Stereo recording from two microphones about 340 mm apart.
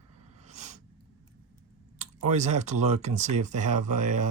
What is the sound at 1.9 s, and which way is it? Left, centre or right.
Speech, centre.